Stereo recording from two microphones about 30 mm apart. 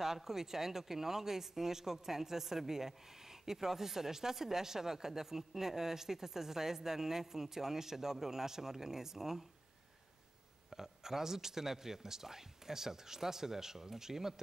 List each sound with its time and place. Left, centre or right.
0.0 s speech: centre
10.7 s speech: centre